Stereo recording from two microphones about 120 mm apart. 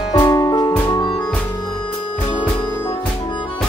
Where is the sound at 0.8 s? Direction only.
40° left (ahead or behind).